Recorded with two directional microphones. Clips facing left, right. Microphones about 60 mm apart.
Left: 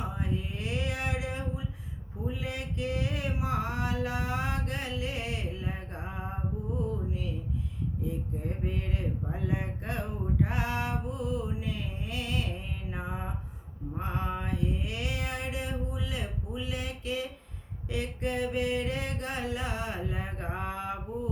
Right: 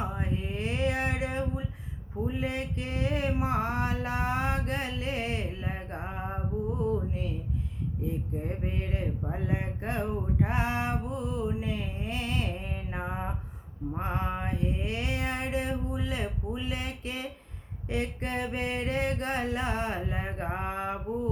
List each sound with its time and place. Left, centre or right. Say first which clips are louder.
0.2 s a sound: right 2 dB; right
2.2 s speech: right 4 dB; right
8.0 s speech: right 3 dB; right